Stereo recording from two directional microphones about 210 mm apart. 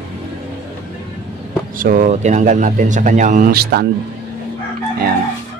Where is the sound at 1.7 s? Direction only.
40° right (ahead or behind).